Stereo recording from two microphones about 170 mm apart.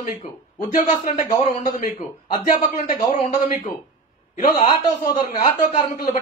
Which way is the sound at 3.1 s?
45° left (ahead or behind).